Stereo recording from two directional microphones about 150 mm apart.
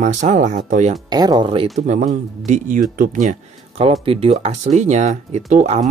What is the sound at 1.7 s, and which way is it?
Speech, 50° right (ahead or behind).